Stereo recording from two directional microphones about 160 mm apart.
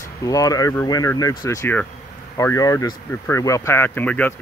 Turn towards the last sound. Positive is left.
turn(degrees=10)  # may be behind; listen again after turning